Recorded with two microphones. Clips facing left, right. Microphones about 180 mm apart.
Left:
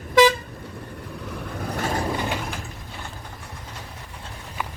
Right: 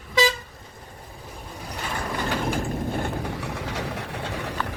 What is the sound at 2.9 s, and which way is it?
Vehicle, 55° right (ahead or behind).